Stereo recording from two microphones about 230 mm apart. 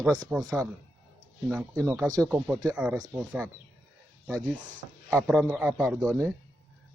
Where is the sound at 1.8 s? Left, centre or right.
Centre.